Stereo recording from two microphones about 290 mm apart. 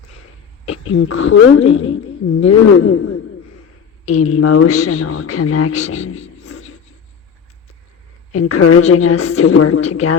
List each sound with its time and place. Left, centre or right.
0.9 s speech: left
6.5 s a sound: left
8.3 s speech: left